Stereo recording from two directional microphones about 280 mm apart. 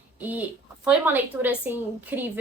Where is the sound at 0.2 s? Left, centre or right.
Centre.